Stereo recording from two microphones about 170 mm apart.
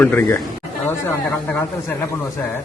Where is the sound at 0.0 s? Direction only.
10° left (ahead or behind).